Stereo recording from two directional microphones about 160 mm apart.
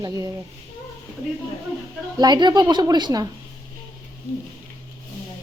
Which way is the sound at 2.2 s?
25° right (ahead or behind).